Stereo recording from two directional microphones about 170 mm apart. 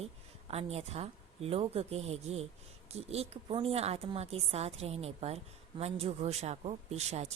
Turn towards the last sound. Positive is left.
turn(degrees=-40)  # may be behind; listen again after turning